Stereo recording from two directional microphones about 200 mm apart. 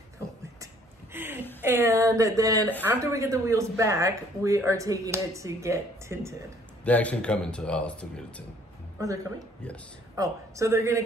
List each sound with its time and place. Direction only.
1.1 s a sound: 10° right (ahead or behind)
1.6 s speech: 10° right (ahead or behind)
6.8 s speech: 5° left (ahead or behind)
10.1 s speech: 15° right (ahead or behind)